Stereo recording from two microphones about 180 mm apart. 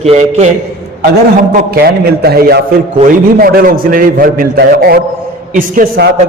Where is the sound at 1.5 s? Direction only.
60° right (ahead or behind).